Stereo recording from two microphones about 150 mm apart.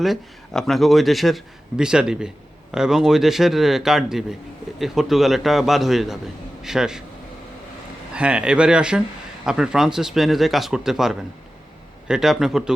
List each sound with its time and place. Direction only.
0.0 s a man's voice: centre (ahead or behind)
8.1 s a man's voice: 5° right (ahead or behind)